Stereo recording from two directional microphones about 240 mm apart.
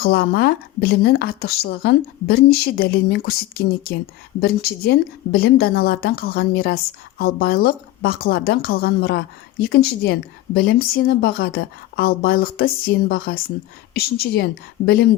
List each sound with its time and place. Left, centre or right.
0.0 s a woman's voice: left